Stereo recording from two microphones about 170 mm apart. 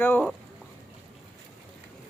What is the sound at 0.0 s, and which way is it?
Speech, 10° left (ahead or behind).